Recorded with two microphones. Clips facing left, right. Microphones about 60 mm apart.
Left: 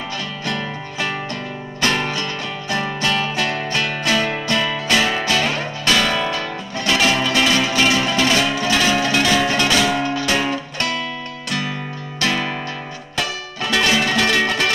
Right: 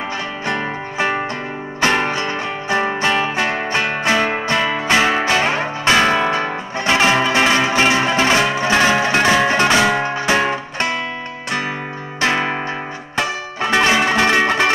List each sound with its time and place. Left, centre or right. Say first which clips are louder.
0.5 s music: right 4 dB; right
12.2 s music: right 3 dB; right